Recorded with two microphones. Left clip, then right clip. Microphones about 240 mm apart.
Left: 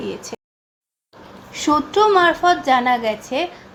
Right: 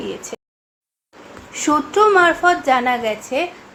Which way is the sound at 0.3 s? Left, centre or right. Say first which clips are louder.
Right 1 dB; left.